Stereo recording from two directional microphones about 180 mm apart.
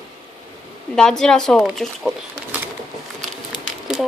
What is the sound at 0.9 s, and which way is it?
Speech, 5° left (ahead or behind).